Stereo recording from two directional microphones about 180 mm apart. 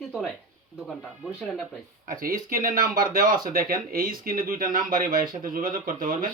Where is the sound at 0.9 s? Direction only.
Centre (ahead or behind).